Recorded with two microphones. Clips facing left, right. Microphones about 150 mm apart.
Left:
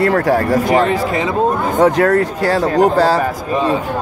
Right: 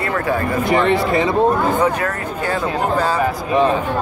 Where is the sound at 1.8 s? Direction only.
90° left.